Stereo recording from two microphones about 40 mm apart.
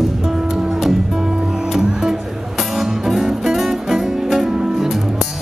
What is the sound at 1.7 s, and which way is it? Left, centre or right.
Music, centre.